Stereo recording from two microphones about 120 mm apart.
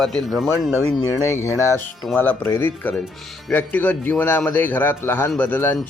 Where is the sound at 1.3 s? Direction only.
25° left (ahead or behind).